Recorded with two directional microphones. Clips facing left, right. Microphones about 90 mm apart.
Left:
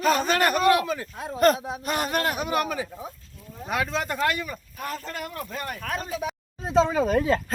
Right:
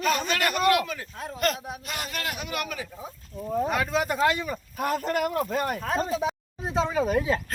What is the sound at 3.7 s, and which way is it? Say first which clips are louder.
Speech: right 1 dB; centre (ahead or behind).